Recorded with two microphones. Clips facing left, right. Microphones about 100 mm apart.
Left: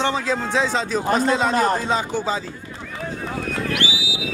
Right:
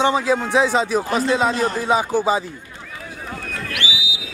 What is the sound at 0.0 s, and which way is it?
Speech, 10° right (ahead or behind).